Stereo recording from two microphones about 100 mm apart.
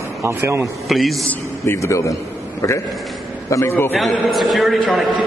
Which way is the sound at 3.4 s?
30° left (ahead or behind).